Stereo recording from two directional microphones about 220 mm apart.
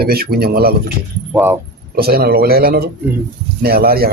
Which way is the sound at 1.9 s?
45° right (ahead or behind).